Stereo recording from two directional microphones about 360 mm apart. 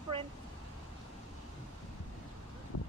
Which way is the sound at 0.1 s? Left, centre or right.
Centre.